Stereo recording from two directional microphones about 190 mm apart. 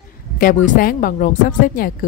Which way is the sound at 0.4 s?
45° left (ahead or behind).